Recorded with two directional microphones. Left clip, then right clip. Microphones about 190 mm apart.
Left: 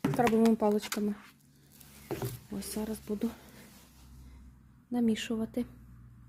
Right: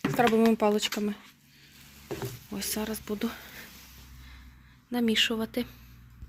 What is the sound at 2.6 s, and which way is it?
Speech, 5° left (ahead or behind).